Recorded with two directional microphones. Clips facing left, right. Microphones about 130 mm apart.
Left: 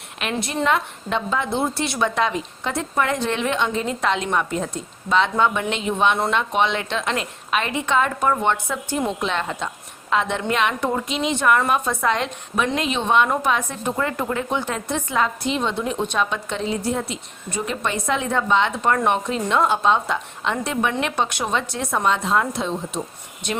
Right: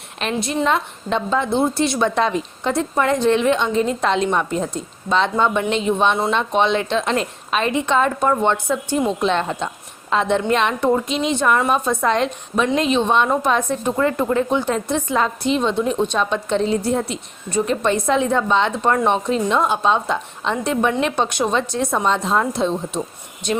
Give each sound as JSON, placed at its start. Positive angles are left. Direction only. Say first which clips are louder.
{"t": 0.4, "sound": "a woman's voice", "louder": "right 1 dB", "side_deg": -20}
{"t": 16.5, "sound": "a woman's voice", "louder": "right 5 dB", "side_deg": -35}